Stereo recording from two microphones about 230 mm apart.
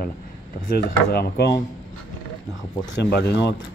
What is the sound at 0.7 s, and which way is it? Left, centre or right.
Speech, left.